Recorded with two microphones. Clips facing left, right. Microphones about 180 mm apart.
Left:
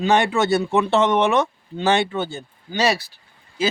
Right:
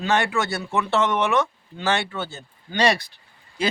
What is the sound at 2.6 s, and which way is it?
Speech, 5° left (ahead or behind).